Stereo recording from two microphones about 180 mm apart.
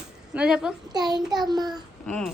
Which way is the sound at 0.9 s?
25° right (ahead or behind).